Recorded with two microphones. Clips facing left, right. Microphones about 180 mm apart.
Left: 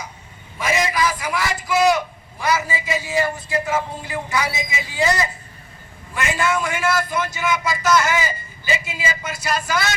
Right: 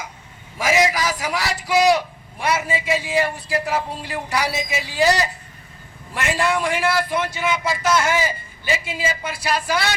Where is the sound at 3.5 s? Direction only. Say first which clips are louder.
Even; 65° right (ahead or behind).